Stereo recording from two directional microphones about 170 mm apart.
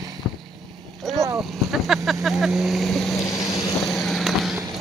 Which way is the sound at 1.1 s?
Centre (ahead or behind).